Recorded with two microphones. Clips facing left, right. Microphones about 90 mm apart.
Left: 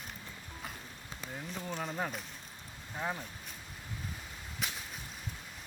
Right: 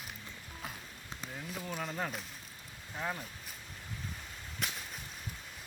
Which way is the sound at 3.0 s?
10° left (ahead or behind).